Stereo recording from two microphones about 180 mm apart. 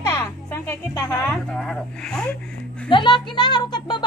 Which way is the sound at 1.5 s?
5° left (ahead or behind).